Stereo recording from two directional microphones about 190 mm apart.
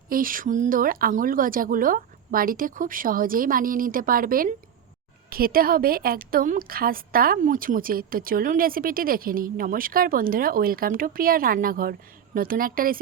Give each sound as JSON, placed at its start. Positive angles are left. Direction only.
{"t": 0.1, "sound": "a woman's voice", "side_deg": -45}